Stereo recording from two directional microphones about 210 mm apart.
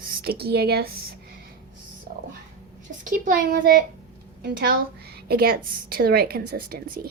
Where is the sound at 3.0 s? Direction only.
40° right (ahead or behind).